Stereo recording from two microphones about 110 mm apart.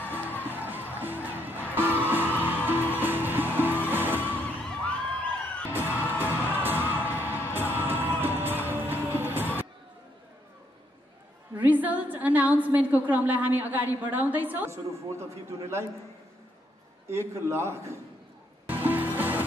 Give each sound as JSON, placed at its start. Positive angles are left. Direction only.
{"t": 0.4, "sound": "music", "side_deg": -15}
{"t": 4.8, "sound": "a sound", "side_deg": 10}
{"t": 5.7, "sound": "music", "side_deg": -20}
{"t": 11.5, "sound": "a sound", "side_deg": -15}
{"t": 13.1, "sound": "a woman's voice", "side_deg": -15}
{"t": 17.1, "sound": "a man's voice", "side_deg": -25}
{"t": 18.7, "sound": "music", "side_deg": -15}